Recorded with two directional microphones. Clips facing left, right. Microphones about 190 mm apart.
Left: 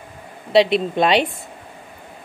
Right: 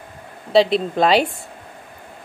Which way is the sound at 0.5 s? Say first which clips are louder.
Even; centre (ahead or behind).